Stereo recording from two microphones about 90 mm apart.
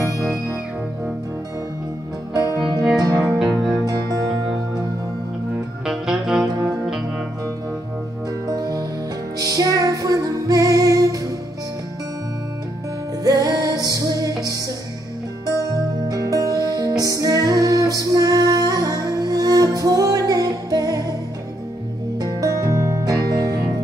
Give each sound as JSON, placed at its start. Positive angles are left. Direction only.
{"t": 0.2, "sound": "music", "side_deg": -5}
{"t": 2.3, "sound": "music", "side_deg": -45}
{"t": 3.2, "sound": "music", "side_deg": -5}
{"t": 3.8, "sound": "music", "side_deg": -45}
{"t": 5.9, "sound": "saxophone", "side_deg": -5}
{"t": 8.5, "sound": "music", "side_deg": -45}
{"t": 13.2, "sound": "music", "side_deg": -40}
{"t": 16.1, "sound": "music", "side_deg": -40}
{"t": 22.2, "sound": "music", "side_deg": -40}